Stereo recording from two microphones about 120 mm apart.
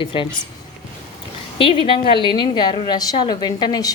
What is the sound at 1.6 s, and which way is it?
Speech, 50° left (ahead or behind).